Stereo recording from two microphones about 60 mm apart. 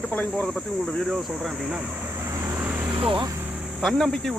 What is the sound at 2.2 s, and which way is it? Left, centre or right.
Vehicle, right.